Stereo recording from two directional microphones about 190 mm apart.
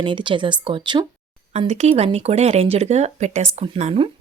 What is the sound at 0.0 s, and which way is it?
Speech, 25° right (ahead or behind).